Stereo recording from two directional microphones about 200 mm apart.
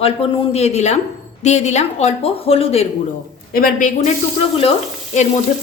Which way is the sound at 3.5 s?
45° left (ahead or behind).